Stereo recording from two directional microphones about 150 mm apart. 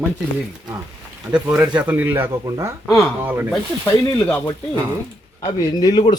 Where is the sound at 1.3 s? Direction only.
5° right (ahead or behind).